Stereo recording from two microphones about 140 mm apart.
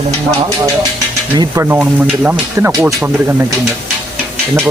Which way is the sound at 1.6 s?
10° right (ahead or behind).